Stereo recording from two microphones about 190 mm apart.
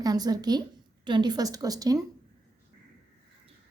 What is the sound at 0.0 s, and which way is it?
A woman's voice, 20° right (ahead or behind).